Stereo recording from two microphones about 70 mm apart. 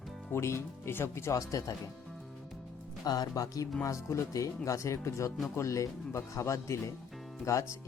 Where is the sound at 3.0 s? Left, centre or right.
Left.